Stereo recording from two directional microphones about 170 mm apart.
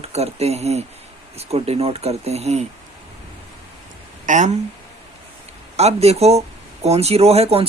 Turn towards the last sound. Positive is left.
turn(degrees=-35)  # may be behind; listen again after turning